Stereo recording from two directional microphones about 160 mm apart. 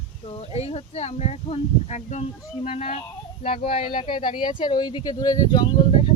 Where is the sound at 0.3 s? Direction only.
40° left (ahead or behind).